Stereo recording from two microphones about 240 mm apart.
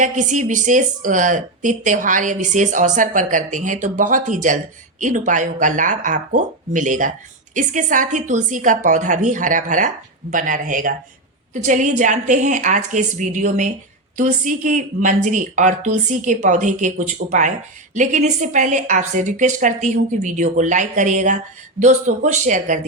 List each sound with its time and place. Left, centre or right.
0.0 s speech: right